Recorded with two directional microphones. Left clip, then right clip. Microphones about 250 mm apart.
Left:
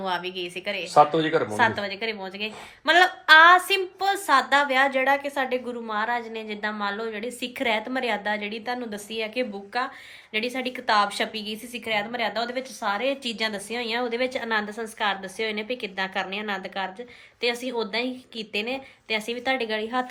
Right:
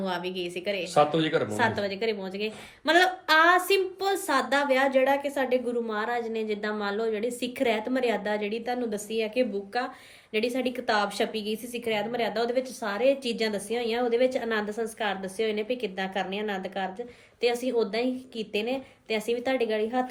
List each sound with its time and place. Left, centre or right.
0.0 s a woman's voice: centre
0.9 s speech: left
1.5 s a woman's voice: centre